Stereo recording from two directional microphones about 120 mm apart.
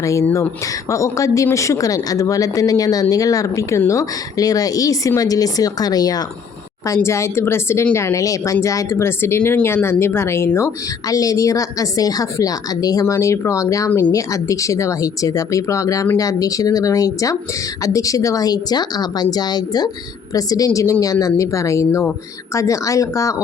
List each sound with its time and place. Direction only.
0.0 s a woman's voice: 25° left (ahead or behind)